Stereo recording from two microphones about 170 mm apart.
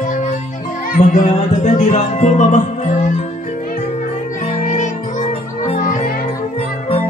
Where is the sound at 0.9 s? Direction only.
50° left (ahead or behind).